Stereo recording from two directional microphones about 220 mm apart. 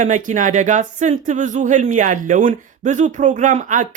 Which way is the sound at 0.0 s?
35° right (ahead or behind).